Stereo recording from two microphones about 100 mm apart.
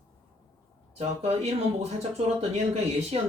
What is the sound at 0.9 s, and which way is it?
Speech, 90° right.